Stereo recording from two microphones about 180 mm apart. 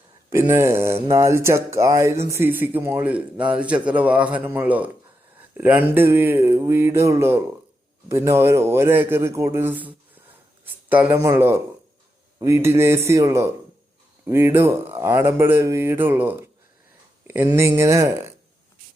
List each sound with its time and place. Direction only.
0.3 s speech: 15° right (ahead or behind)